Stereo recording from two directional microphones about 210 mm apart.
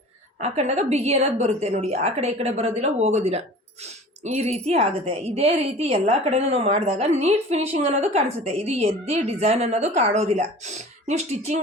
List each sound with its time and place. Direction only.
0.3 s a woman's voice: 30° right (ahead or behind)